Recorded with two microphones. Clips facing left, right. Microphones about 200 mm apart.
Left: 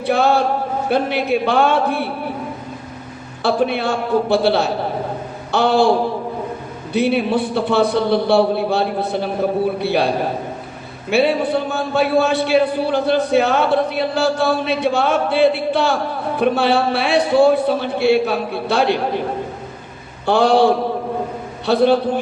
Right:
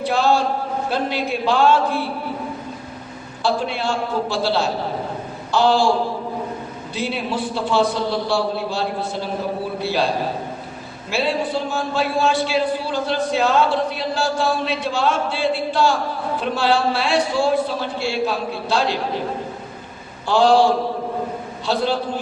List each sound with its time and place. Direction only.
0.0 s a sound: 60° left (ahead or behind)
0.9 s a man's voice: 60° left (ahead or behind)
3.4 s a man's voice: 60° left (ahead or behind)
6.9 s a man's voice: 60° left (ahead or behind)
11.1 s a man's voice: 60° left (ahead or behind)
20.2 s a man's voice: 60° left (ahead or behind)